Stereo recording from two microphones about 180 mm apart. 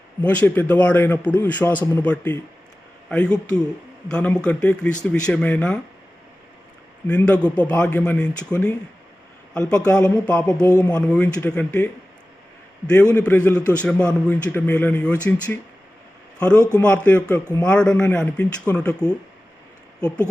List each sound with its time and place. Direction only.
0.2 s a man's voice: 10° left (ahead or behind)
7.1 s a man's voice: 5° left (ahead or behind)
10.6 s speech: 20° left (ahead or behind)
10.9 s a man's voice: 5° left (ahead or behind)
12.9 s a man's voice: 5° left (ahead or behind)
16.7 s a man's voice: 5° left (ahead or behind)